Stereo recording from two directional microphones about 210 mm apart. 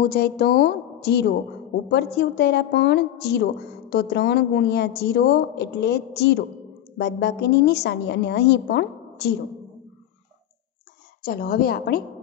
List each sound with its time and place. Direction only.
0.0 s a woman's voice: 50° left (ahead or behind)
11.2 s a woman's voice: 45° left (ahead or behind)